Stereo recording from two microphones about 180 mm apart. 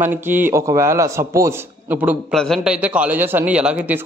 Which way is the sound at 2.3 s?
Centre (ahead or behind).